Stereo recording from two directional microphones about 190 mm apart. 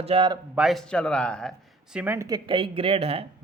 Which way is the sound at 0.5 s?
Centre (ahead or behind).